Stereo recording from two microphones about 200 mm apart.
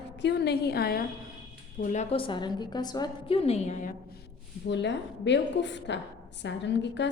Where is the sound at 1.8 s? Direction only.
30° left (ahead or behind).